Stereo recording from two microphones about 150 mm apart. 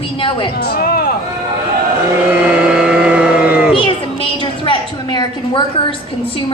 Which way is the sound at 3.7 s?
35° left (ahead or behind).